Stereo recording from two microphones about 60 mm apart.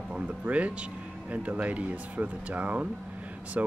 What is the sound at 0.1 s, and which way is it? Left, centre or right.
Speech, centre.